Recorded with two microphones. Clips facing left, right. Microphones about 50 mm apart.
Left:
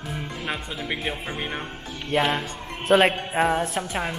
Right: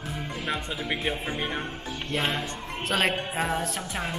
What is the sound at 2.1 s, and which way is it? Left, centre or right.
A man's voice, centre.